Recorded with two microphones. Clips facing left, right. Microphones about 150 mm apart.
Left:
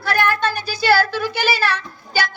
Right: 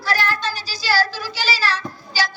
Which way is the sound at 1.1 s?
60° left (ahead or behind).